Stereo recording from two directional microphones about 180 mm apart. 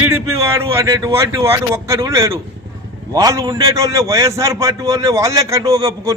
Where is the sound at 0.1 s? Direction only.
15° right (ahead or behind).